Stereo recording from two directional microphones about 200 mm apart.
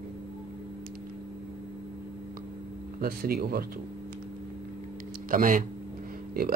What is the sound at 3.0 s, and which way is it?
Speech, 50° right (ahead or behind).